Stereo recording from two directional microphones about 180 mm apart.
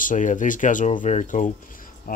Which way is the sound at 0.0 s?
45° left (ahead or behind).